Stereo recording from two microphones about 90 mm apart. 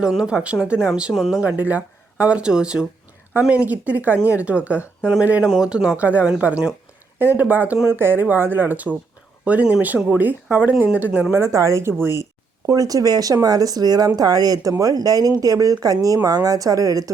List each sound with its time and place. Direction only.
0.0 s speech: 10° right (ahead or behind)
1.4 s speech: 20° right (ahead or behind)
11.3 s speech: 30° right (ahead or behind)
12.6 s speech: 40° right (ahead or behind)